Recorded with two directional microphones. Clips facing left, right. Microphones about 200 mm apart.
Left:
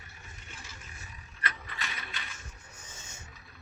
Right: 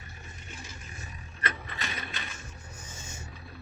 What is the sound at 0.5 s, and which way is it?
Vehicle, 15° right (ahead or behind).